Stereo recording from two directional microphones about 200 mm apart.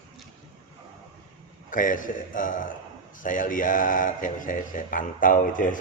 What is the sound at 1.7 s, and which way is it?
Mantra, 40° left (ahead or behind).